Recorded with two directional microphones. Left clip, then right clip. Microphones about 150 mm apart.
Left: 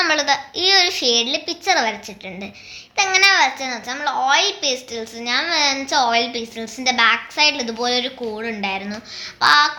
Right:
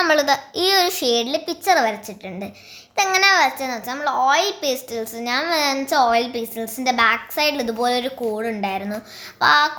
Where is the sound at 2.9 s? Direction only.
45° right (ahead or behind).